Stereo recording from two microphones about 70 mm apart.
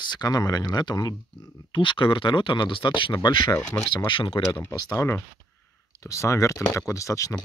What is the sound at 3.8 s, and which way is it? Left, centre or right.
Speech, left.